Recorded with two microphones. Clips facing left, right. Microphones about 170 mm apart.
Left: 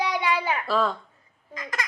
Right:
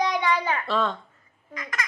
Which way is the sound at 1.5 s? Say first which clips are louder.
Left 1 dB; 30° left (ahead or behind).